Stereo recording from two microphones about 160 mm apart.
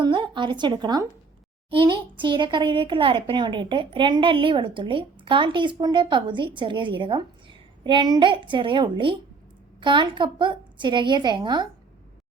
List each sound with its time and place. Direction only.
0.0 s a child's voice: 30° right (ahead or behind)